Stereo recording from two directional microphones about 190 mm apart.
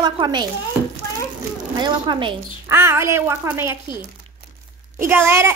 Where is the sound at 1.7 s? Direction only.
25° right (ahead or behind).